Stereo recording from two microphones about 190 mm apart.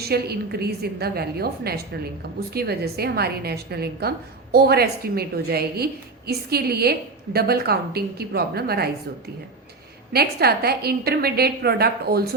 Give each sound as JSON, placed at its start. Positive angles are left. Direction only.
{"t": 0.0, "sound": "a woman's voice", "side_deg": -55}
{"t": 10.1, "sound": "a woman's voice", "side_deg": -55}